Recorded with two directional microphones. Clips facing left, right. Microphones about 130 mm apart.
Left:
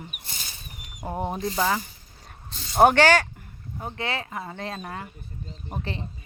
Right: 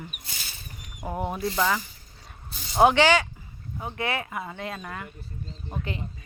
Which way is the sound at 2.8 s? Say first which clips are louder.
Left 2 dB; 45° left (ahead or behind).